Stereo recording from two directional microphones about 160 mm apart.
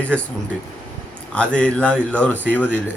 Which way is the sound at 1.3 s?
5° left (ahead or behind).